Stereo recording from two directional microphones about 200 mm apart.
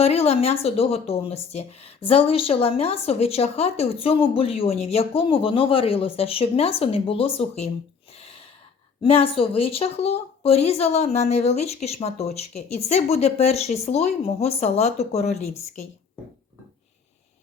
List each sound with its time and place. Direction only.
0.0 s speech: 30° left (ahead or behind)
9.0 s speech: 30° left (ahead or behind)